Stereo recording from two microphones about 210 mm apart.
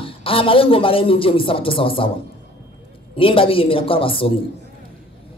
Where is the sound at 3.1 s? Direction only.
25° left (ahead or behind).